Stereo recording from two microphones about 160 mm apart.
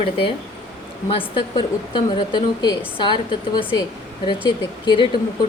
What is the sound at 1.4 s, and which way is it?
A woman's voice, 30° left (ahead or behind).